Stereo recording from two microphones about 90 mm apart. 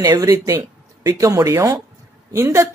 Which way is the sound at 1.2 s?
40° right (ahead or behind).